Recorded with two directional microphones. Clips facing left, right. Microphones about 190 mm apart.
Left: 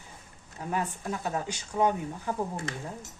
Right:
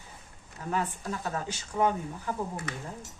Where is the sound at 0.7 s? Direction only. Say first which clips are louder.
Even; 15° left (ahead or behind).